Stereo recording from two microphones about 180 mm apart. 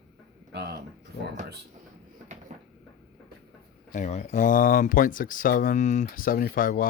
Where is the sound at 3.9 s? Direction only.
40° left (ahead or behind).